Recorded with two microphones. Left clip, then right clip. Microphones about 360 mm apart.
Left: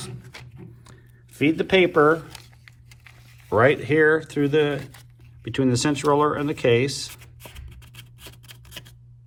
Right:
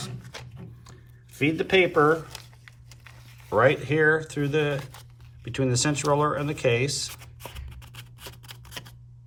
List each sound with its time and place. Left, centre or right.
0.2 s a sound: centre
1.4 s speech: centre
2.3 s a sound: centre
3.5 s speech: left
4.8 s speech: centre
5.5 s speech: left
7.1 s scissors: centre